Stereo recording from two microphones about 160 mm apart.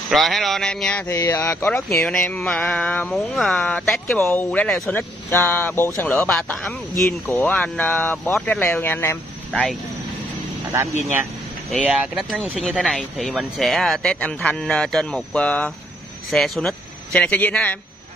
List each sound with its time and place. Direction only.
0.1 s speech: centre (ahead or behind)
4.2 s speech: 15° left (ahead or behind)
4.5 s speech: 5° left (ahead or behind)
9.5 s speech: 5° left (ahead or behind)
10.7 s speech: 10° right (ahead or behind)
13.2 s speech: centre (ahead or behind)